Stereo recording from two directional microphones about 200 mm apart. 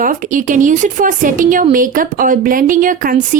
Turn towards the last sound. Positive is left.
turn(degrees=-40)  # may be behind; listen again after turning